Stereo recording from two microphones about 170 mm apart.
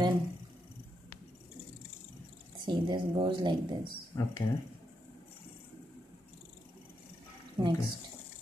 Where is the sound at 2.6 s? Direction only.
25° right (ahead or behind).